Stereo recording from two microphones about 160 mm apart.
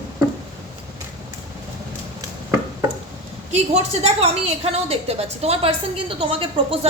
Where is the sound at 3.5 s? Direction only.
40° right (ahead or behind).